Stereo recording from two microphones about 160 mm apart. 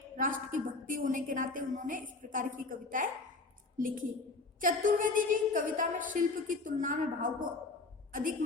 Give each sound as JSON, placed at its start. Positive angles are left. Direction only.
{"t": 0.2, "sound": "a woman's voice", "side_deg": -55}